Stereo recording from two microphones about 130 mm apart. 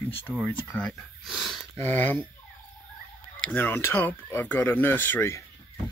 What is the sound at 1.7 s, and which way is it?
Speech, 15° left (ahead or behind).